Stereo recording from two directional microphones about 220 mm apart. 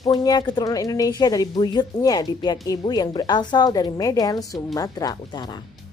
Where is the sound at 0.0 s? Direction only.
15° left (ahead or behind).